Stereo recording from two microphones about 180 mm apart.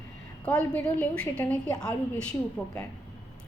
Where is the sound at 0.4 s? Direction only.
5° left (ahead or behind).